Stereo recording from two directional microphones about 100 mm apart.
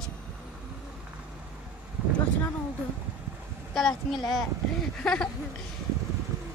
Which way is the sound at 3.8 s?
Centre (ahead or behind).